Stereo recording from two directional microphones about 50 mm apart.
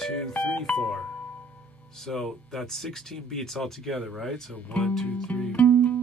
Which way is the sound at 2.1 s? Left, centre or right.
Centre.